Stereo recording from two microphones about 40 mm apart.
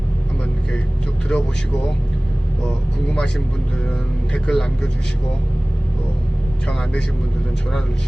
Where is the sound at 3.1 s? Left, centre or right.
Centre.